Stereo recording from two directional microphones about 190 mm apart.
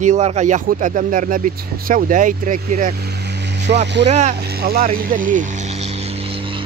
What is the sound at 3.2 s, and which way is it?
Vehicle, 65° right (ahead or behind).